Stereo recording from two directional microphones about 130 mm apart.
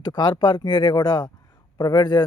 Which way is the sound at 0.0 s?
30° left (ahead or behind).